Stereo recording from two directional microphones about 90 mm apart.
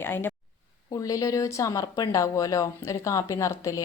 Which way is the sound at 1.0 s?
40° left (ahead or behind).